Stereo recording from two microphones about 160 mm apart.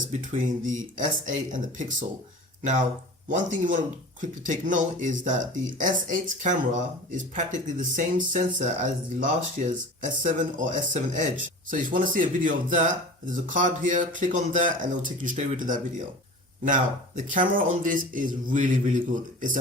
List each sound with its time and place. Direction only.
0.1 s speech: 55° right (ahead or behind)
3.2 s speech: 55° right (ahead or behind)